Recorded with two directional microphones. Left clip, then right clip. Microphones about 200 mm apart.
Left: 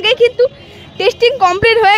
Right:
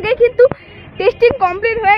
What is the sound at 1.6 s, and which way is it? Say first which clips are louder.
Speech: left 5 dB; 45° left (ahead or behind).